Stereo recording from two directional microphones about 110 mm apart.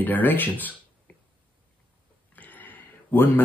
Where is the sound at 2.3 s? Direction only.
15° left (ahead or behind).